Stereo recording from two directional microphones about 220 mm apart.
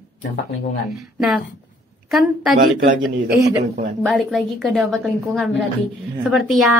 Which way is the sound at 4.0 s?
Centre (ahead or behind).